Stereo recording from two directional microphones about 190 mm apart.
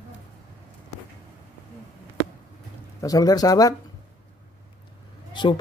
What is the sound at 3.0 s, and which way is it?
Speech, 20° left (ahead or behind).